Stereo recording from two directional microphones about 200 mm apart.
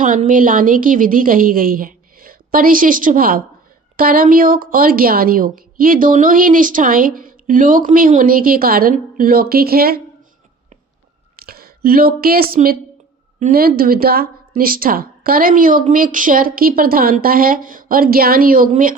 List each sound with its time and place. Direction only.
0.0 s a woman's voice: 40° right (ahead or behind)
11.3 s a woman's voice: 50° right (ahead or behind)